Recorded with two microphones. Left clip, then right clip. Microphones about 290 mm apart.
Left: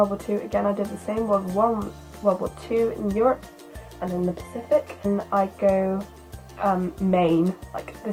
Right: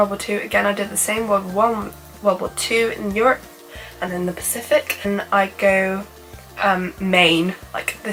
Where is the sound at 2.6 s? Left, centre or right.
Centre.